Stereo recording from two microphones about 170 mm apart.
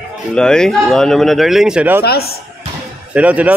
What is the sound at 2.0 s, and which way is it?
Speech, 65° left (ahead or behind).